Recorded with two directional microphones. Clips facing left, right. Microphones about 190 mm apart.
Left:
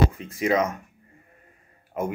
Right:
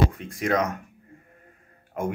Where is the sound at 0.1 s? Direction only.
Centre (ahead or behind).